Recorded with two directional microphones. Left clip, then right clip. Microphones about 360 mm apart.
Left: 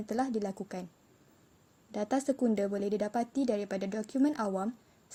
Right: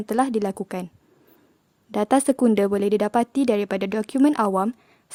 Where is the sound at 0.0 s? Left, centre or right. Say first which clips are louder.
Right 11 dB; right.